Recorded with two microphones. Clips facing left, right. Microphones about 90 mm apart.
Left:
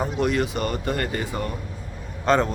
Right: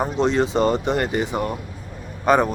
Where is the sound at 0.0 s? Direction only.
25° right (ahead or behind).